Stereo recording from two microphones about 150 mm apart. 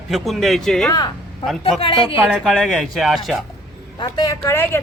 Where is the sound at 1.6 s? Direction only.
35° left (ahead or behind).